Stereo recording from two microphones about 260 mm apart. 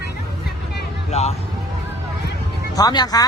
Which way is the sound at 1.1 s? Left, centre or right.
Left.